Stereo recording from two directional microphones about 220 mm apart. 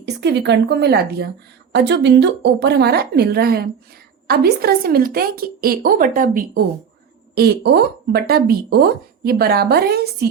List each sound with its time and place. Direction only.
0.0 s a woman's voice: 50° right (ahead or behind)